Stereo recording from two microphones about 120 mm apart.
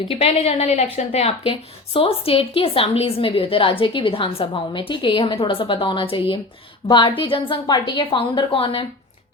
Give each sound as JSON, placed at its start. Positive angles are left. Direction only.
{"t": 0.1, "sound": "a woman's voice", "side_deg": 55}